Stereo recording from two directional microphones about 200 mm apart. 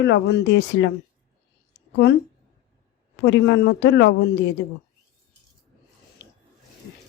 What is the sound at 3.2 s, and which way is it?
A woman's voice, 60° left (ahead or behind).